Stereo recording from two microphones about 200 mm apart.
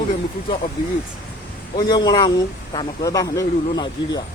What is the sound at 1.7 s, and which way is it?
Speech, 20° left (ahead or behind).